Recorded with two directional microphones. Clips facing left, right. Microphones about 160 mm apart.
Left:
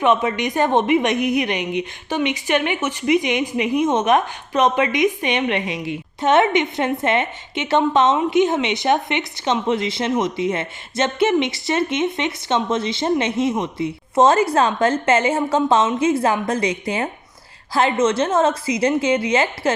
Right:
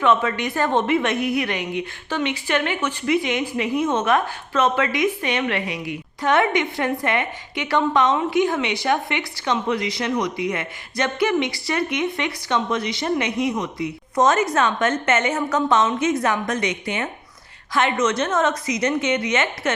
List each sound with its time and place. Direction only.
0.0 s a woman's voice: 15° left (ahead or behind)